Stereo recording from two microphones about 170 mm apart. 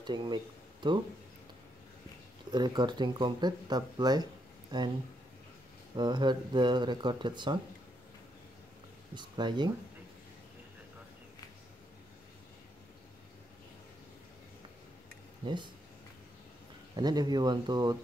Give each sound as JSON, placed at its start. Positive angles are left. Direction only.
{"t": 0.0, "sound": "speech", "side_deg": -25}
{"t": 2.5, "sound": "speech", "side_deg": -25}
{"t": 5.9, "sound": "speech", "side_deg": -25}
{"t": 9.1, "sound": "speech", "side_deg": -25}
{"t": 15.4, "sound": "speech", "side_deg": -25}
{"t": 16.9, "sound": "speech", "side_deg": -25}